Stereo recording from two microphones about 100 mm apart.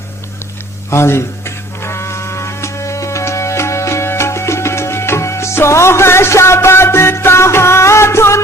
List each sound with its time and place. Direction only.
0.9 s music: 25° left (ahead or behind)